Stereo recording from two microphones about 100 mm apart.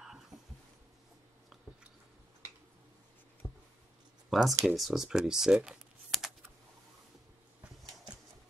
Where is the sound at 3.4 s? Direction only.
15° right (ahead or behind).